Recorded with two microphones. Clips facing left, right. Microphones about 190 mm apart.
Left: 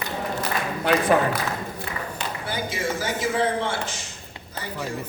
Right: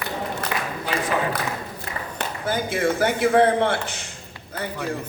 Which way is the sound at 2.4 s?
50° right (ahead or behind).